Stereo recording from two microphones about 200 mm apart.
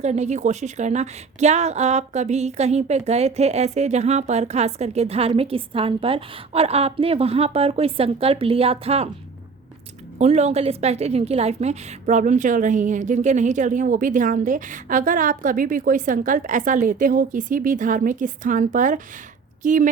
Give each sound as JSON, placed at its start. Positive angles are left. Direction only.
{"t": 0.0, "sound": "a woman's voice", "side_deg": -35}
{"t": 10.2, "sound": "a woman's voice", "side_deg": -35}